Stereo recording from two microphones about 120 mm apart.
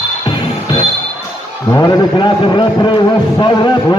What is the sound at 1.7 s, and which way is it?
A man's voice, 35° left (ahead or behind).